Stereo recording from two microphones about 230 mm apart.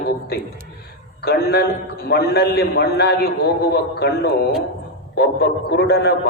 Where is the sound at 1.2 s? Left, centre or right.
Left.